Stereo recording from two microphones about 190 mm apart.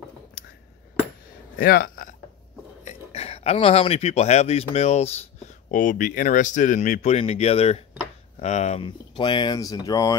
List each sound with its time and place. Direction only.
1.6 s speech: 50° left (ahead or behind)
2.8 s speech: 35° left (ahead or behind); by 10.1 s 20° left (ahead or behind)